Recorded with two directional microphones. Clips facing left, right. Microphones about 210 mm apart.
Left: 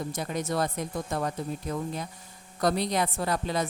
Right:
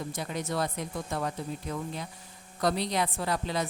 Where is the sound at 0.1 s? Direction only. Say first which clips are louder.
Left 3 dB; 45° left (ahead or behind).